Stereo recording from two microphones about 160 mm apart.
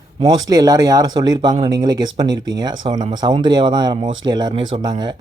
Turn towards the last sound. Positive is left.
turn(degrees=-25)  # may be behind; listen again after turning